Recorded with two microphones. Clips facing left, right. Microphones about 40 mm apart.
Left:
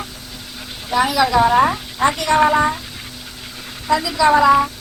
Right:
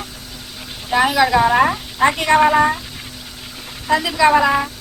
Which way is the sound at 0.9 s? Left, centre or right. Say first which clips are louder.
Right 1 dB; right.